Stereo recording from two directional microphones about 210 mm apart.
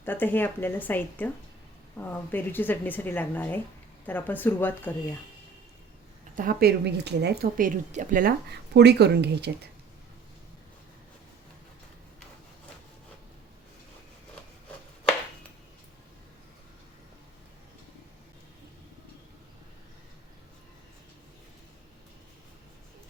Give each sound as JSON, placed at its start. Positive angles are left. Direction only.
{"t": 0.0, "sound": "speech", "side_deg": 10}
{"t": 6.3, "sound": "speech", "side_deg": -40}